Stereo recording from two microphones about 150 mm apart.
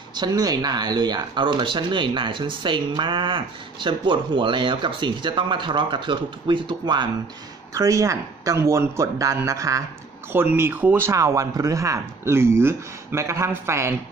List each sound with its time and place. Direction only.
0.1 s speech: 25° right (ahead or behind)
7.7 s speech: 20° right (ahead or behind)